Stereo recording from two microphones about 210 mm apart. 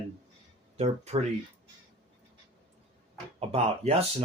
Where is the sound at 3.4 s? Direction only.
30° right (ahead or behind).